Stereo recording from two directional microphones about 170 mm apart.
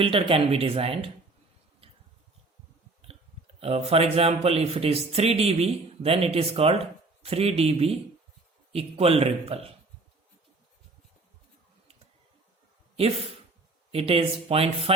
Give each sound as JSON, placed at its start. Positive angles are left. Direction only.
{"t": 0.0, "sound": "speech", "side_deg": -30}
{"t": 3.1, "sound": "speech", "side_deg": -35}
{"t": 13.0, "sound": "speech", "side_deg": -35}